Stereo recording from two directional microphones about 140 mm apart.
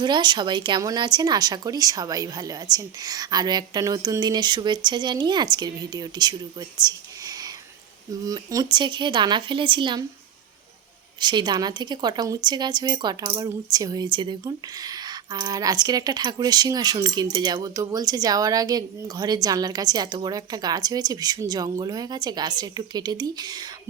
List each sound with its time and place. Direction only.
0.0 s speech: 30° right (ahead or behind)
11.2 s speech: 30° right (ahead or behind)